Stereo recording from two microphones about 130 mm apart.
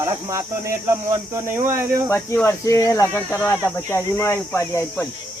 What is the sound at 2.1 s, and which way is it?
Speech, 20° left (ahead or behind).